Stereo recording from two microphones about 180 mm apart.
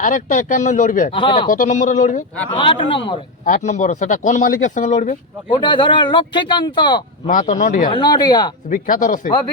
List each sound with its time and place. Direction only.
0.0 s speech: 45° left (ahead or behind)
1.1 s speech: 25° left (ahead or behind)
1.5 s speech: 45° left (ahead or behind)
2.5 s speech: 25° left (ahead or behind)
3.4 s speech: 45° left (ahead or behind)
5.5 s speech: 25° left (ahead or behind)
7.3 s speech: 45° left (ahead or behind)
7.9 s speech: 25° left (ahead or behind)
8.7 s speech: 45° left (ahead or behind)